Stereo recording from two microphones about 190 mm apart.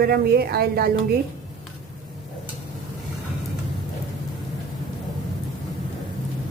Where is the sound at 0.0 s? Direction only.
55° right (ahead or behind).